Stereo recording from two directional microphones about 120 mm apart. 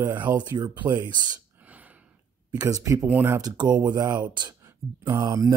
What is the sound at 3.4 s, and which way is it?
Speech, 35° right (ahead or behind).